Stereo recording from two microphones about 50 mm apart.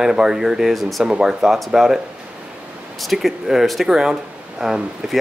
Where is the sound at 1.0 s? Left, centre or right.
Centre.